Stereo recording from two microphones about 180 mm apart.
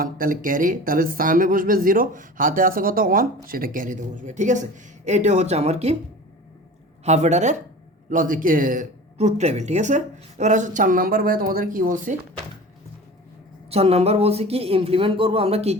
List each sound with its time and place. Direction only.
0.0 s speech: 50° right (ahead or behind)
7.0 s speech: 40° right (ahead or behind)
13.7 s speech: 35° right (ahead or behind)